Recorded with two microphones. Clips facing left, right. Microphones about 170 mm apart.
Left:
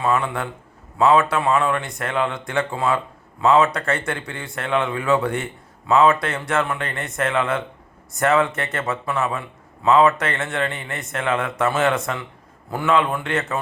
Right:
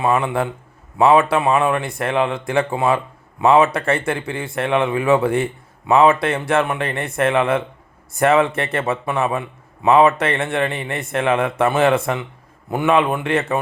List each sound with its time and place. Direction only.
0.0 s a man's voice: 25° right (ahead or behind)
9.8 s a man's voice: 15° right (ahead or behind)
10.1 s a man's voice: 30° right (ahead or behind)